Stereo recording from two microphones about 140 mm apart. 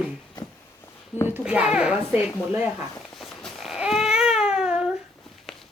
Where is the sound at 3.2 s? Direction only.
Centre (ahead or behind).